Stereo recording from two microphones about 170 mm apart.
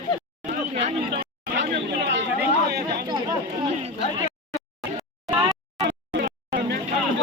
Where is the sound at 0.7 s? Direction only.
40° right (ahead or behind).